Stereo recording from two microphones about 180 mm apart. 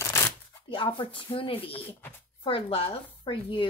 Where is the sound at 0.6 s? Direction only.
30° left (ahead or behind).